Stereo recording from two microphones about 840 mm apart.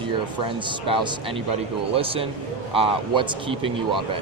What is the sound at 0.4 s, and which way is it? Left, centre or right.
A man's voice, centre.